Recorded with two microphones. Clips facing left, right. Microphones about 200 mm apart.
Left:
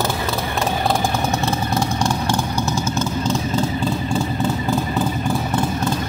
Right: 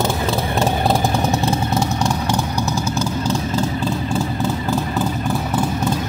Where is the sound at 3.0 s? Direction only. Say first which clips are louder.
Even; 5° right (ahead or behind).